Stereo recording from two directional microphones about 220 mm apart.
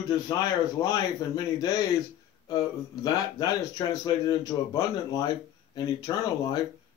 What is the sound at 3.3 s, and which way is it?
Speech, 15° left (ahead or behind).